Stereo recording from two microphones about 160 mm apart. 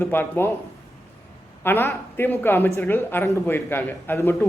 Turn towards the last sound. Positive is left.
turn(degrees=15)  # may be behind; listen again after turning